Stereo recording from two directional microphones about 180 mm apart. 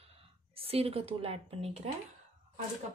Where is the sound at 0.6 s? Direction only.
30° right (ahead or behind).